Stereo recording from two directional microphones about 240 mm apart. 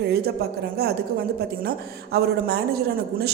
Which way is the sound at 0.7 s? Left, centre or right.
Right.